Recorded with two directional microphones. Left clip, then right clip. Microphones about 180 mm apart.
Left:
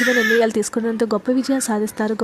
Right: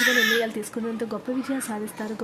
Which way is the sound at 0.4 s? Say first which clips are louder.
Left 10 dB; 30° left (ahead or behind).